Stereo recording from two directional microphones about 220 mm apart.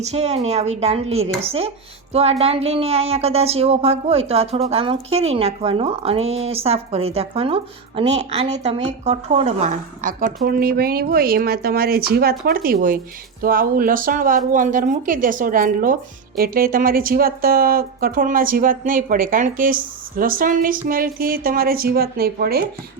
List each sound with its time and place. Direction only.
0.0 s a woman's voice: 30° right (ahead or behind)